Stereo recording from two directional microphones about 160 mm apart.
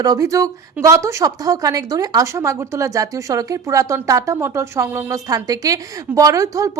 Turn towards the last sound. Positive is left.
turn(degrees=-20)  # may be behind; listen again after turning